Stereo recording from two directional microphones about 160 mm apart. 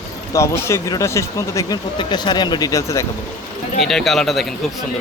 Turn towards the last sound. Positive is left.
turn(degrees=0)  # may be behind; listen again after turning